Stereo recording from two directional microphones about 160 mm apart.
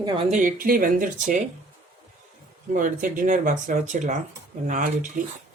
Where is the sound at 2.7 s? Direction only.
55° right (ahead or behind).